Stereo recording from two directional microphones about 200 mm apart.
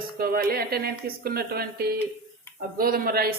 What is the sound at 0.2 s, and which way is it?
Frying, 50° right (ahead or behind).